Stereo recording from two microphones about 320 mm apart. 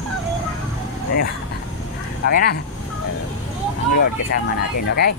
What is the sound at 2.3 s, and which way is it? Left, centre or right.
Speech, left.